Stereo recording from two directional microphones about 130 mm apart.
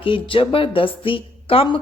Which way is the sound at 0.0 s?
40° left (ahead or behind).